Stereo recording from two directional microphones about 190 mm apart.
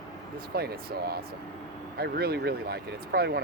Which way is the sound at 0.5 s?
55° right (ahead or behind).